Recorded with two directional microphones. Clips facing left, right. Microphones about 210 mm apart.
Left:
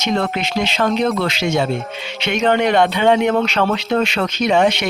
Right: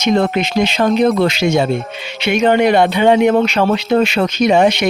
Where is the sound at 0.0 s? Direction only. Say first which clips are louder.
Right 5 dB; 15° right (ahead or behind).